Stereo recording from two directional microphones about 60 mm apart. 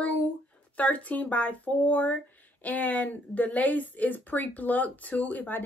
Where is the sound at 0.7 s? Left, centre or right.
Left.